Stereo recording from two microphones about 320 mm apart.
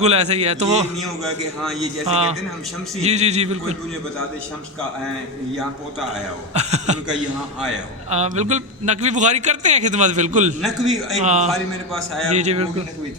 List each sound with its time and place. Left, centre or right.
0.0 s a man's voice: centre
0.9 s a man's voice: centre
2.0 s a man's voice: centre
6.5 s a man's voice: right
8.1 s a man's voice: right
10.6 s a man's voice: centre
11.2 s a man's voice: right
11.4 s a man's voice: centre
12.3 s a man's voice: right